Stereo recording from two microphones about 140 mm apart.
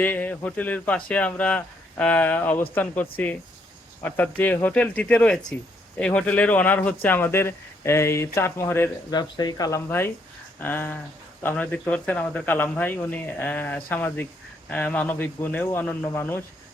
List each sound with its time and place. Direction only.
0.0 s speech: 10° left (ahead or behind)
9.0 s speech: 30° left (ahead or behind)